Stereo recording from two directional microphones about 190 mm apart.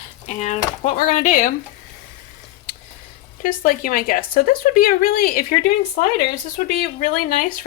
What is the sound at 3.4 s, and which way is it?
A woman's voice, 45° left (ahead or behind).